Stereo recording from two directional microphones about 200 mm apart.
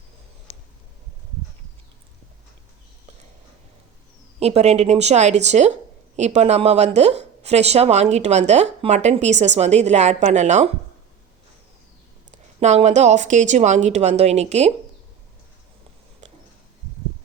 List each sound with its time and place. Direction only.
4.4 s speech: 30° right (ahead or behind)
12.3 s speech: 35° right (ahead or behind)
16.2 s a sound: 35° right (ahead or behind)